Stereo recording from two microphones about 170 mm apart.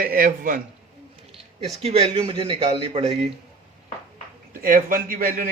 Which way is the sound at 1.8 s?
35° right (ahead or behind).